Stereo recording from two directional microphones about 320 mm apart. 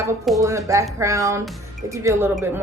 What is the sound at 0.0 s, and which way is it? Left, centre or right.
A woman's voice, centre.